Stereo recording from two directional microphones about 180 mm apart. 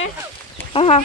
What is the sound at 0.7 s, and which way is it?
Speech, 35° left (ahead or behind).